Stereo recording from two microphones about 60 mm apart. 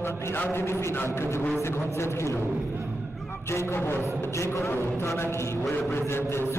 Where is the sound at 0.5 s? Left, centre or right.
Left.